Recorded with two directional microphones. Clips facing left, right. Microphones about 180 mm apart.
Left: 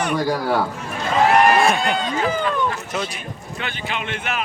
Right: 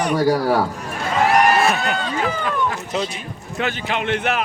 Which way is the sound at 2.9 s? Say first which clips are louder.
Right 2 dB; 25° right (ahead or behind).